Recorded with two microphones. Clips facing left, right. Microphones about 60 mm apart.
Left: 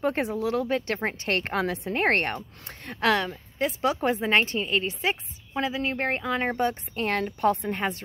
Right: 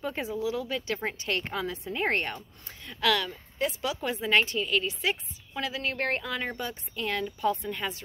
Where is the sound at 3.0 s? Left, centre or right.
Left.